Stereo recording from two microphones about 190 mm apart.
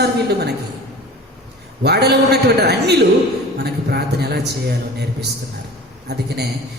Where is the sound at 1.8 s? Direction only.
60° right (ahead or behind).